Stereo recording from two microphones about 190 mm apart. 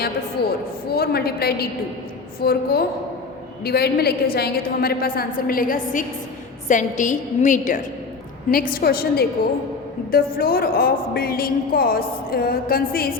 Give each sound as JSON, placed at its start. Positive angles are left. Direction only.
{"t": 0.4, "sound": "a woman's voice", "side_deg": 60}